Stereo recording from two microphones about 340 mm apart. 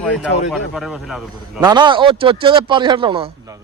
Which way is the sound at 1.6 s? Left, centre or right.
Centre.